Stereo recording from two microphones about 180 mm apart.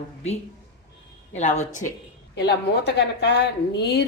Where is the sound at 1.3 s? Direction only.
40° left (ahead or behind).